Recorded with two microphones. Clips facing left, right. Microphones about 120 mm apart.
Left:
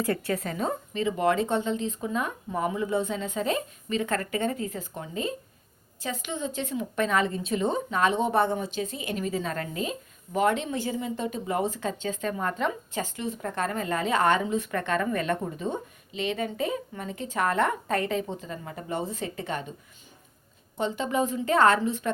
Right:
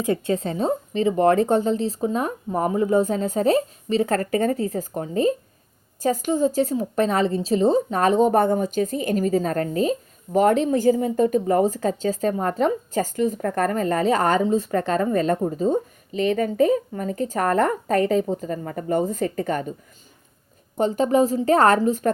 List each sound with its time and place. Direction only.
0.0 s a woman's voice: 20° right (ahead or behind); by 19.7 s 45° right (ahead or behind)
20.7 s a woman's voice: 40° right (ahead or behind)